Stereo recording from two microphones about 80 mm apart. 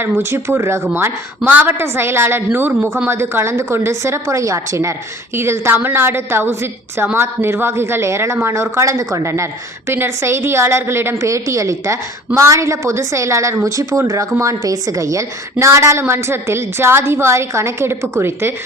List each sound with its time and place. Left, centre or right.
0.0 s a woman's voice: right